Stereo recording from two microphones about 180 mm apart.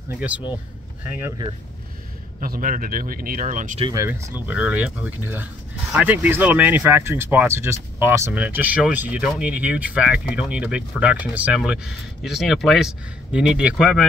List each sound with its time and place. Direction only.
0.1 s speech: 10° right (ahead or behind)
2.4 s speech: 50° right (ahead or behind)
3.8 s speech: 20° right (ahead or behind)
4.1 s speech: 10° right (ahead or behind)